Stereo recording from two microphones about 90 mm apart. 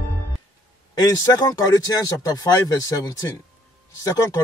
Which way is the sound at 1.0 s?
40° left (ahead or behind).